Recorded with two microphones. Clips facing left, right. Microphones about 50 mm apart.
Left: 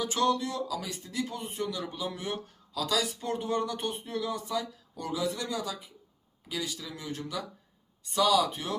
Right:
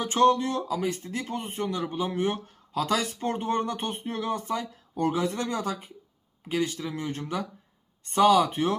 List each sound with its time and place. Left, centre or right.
0.0 s speech: right